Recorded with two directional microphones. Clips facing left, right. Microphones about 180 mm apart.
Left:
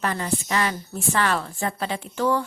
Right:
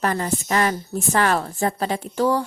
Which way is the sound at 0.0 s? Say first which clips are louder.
Right 3 dB; 40° right (ahead or behind).